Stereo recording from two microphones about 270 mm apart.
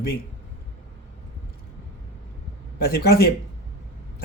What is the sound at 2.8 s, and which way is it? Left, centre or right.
Speech, left.